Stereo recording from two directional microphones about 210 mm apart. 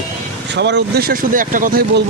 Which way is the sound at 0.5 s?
55° right (ahead or behind).